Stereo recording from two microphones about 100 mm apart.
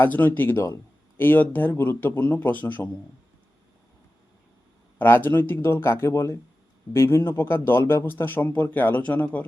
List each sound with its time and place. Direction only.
0.0 s speech: 20° left (ahead or behind)
4.9 s speech: 20° left (ahead or behind)